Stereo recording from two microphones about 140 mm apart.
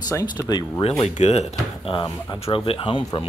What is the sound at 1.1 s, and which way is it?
Speech, 55° left (ahead or behind).